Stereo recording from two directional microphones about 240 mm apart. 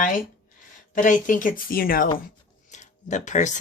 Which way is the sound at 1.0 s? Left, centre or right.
Left.